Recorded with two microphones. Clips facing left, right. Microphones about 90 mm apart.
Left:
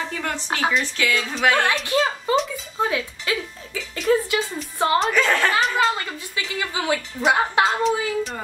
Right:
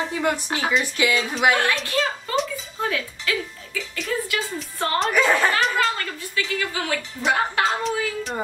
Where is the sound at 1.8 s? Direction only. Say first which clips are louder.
Left 3 dB; 20° left (ahead or behind).